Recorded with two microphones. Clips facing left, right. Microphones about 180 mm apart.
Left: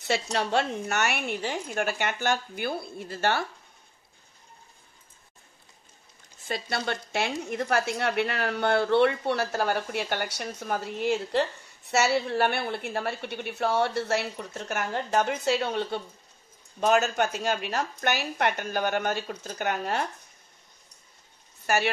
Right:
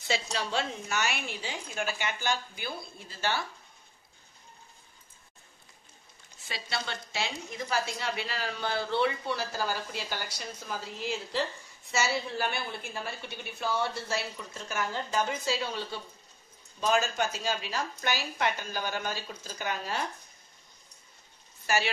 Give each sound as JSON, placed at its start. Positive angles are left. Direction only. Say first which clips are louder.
{"t": 0.1, "sound": "a woman's voice", "louder": "left 5 dB", "side_deg": 60}
{"t": 6.4, "sound": "a woman's voice", "louder": "left 6 dB", "side_deg": 50}
{"t": 21.6, "sound": "speech", "louder": "left 4 dB", "side_deg": 55}